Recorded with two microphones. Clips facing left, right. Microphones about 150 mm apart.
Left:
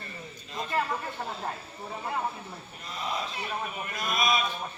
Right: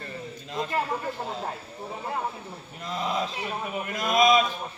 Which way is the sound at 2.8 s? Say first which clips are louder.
Right 6 dB; 90° right.